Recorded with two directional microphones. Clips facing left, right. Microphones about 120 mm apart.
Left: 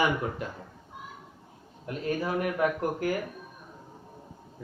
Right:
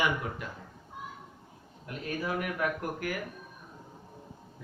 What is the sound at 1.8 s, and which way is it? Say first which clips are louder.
A man's voice: left 4 dB; 30° left (ahead or behind).